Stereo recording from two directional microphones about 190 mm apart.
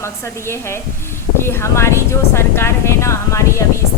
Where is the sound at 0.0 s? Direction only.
15° left (ahead or behind).